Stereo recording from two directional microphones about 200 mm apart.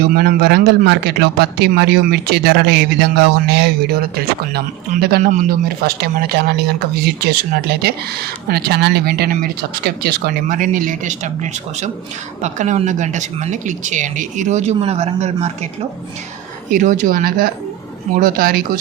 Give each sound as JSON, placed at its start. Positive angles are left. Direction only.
{"t": 0.0, "sound": "speech", "side_deg": -50}
{"t": 16.7, "sound": "speech", "side_deg": -40}